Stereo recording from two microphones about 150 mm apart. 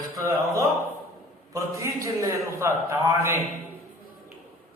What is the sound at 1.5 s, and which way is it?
A man's voice, 20° right (ahead or behind).